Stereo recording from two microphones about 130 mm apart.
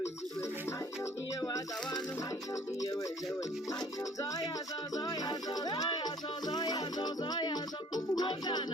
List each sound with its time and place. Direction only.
1.4 s music: 30° left (ahead or behind)